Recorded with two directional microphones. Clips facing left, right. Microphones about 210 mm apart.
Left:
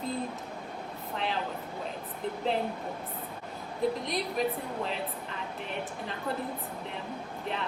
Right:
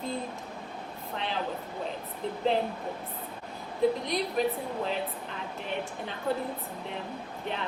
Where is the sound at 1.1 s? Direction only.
Centre (ahead or behind).